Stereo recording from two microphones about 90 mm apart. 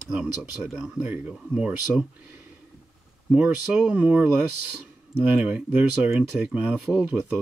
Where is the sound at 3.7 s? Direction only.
15° right (ahead or behind).